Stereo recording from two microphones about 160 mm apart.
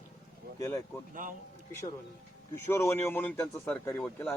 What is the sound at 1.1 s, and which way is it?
Speech, 55° right (ahead or behind).